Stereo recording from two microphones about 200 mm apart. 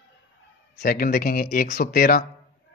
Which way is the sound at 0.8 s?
45° left (ahead or behind).